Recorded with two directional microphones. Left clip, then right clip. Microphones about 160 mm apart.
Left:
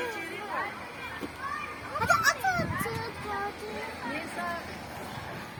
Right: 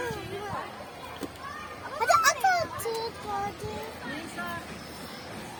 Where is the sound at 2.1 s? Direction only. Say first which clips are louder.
Right 3 dB; 90° right.